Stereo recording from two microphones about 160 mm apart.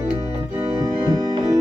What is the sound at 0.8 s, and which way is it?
Organ, 25° right (ahead or behind).